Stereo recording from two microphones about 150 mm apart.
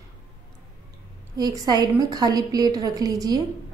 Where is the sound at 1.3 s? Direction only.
25° right (ahead or behind).